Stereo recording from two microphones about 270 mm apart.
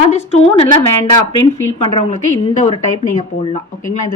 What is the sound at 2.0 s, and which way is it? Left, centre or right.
Speech, left.